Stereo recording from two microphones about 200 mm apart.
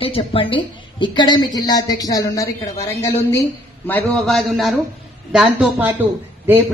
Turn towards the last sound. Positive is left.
turn(degrees=-10)  # may be behind; listen again after turning